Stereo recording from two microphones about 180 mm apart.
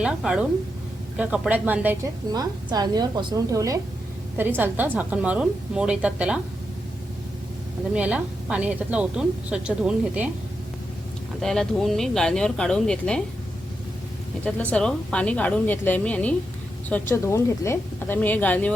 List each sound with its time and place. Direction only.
0.0 s a woman's voice: 5° right (ahead or behind)
2.3 s a woman's voice: 20° right (ahead or behind); by 6.4 s 5° right (ahead or behind)
7.9 s a woman's voice: 5° right (ahead or behind)
11.3 s speech: 5° left (ahead or behind)
14.4 s speech: 5° left (ahead or behind)